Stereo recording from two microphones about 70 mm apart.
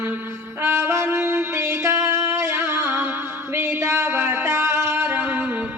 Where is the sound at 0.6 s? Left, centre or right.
Right.